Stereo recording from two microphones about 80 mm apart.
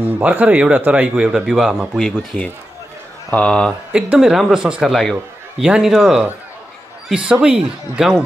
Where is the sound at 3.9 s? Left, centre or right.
Centre.